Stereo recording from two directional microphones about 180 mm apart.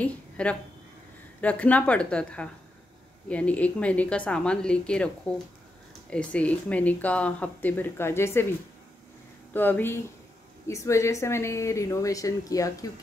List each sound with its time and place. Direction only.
0.0 s speech: 5° left (ahead or behind)
9.5 s speech: 10° left (ahead or behind)